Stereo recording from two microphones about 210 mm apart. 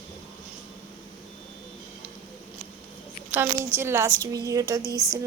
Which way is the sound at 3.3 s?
10° right (ahead or behind).